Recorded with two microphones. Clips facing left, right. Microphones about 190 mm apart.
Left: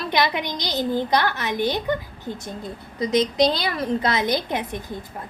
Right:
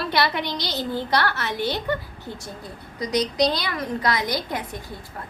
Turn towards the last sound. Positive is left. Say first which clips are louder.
# left 4 dB
turn(degrees=20)  # may be behind; listen again after turning